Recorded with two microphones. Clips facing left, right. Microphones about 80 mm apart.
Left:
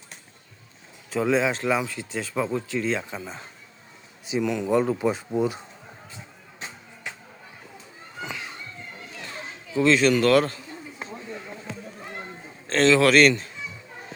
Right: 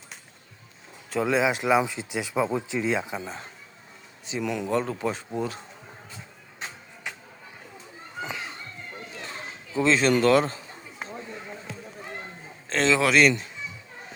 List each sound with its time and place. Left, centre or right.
1.1 s speech: centre
8.2 s children playing: right
9.7 s speech: right
10.2 s speech: centre
12.6 s speech: centre